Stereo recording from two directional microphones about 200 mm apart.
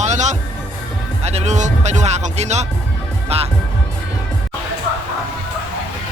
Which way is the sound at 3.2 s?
30° right (ahead or behind).